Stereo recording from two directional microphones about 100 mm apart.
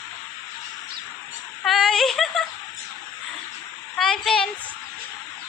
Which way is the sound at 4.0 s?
5° left (ahead or behind).